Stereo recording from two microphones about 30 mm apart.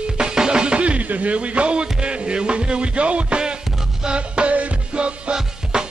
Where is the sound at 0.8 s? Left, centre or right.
Right.